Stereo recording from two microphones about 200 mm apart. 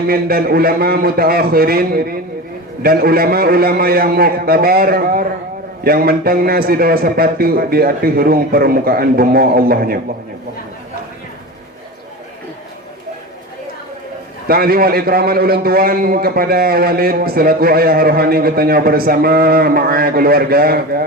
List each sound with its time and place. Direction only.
0.1 s a man's voice: 50° right (ahead or behind)
14.4 s a man's voice: 50° right (ahead or behind)